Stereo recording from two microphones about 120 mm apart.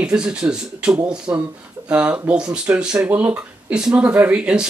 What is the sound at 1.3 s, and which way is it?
Speech, 15° right (ahead or behind).